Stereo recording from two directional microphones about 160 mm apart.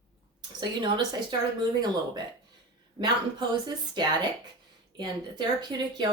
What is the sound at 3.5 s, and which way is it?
Speech, 25° right (ahead or behind).